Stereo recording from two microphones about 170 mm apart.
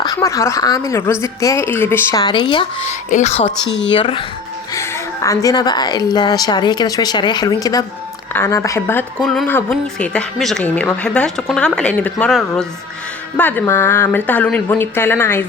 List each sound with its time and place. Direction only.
0.0 s speech: 20° left (ahead or behind)
2.2 s a woman's voice: 25° left (ahead or behind)
3.1 s speech: 45° left (ahead or behind)
3.7 s speech: 90° left
3.9 s speech: 30° left (ahead or behind)
4.7 s a woman's voice: 20° left (ahead or behind)